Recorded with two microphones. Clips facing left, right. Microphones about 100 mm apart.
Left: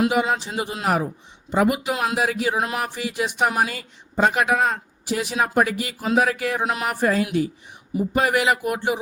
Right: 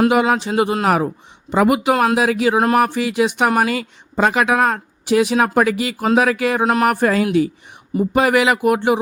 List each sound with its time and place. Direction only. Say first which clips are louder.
0.1 s speech: right 6 dB; 85° right
1.5 s speech: right 6 dB; 90° right
2.1 s speech: right 6 dB; 90° right
6.8 s speech: right 6 dB; 65° right (ahead or behind); by 9.0 s 85° right